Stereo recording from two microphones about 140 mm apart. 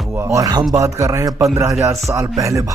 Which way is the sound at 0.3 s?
25° right (ahead or behind).